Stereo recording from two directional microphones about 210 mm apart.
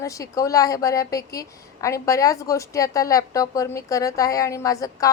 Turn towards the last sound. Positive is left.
turn(degrees=15)  # may be behind; listen again after turning